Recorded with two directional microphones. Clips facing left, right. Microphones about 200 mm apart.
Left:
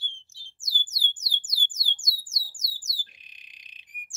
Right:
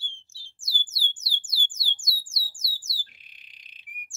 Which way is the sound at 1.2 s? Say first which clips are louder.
Right 1 dB; 20° left (ahead or behind).